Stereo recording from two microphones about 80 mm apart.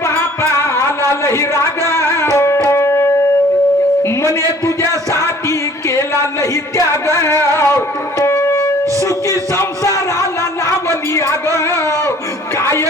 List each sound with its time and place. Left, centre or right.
0.1 s music: left
10.8 s a man's voice: left